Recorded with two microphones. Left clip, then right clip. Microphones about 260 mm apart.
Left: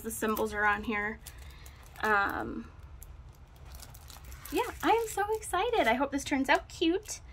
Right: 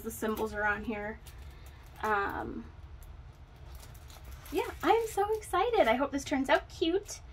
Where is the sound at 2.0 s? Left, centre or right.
Left.